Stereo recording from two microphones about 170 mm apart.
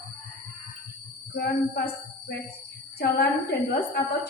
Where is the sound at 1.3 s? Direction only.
70° left (ahead or behind).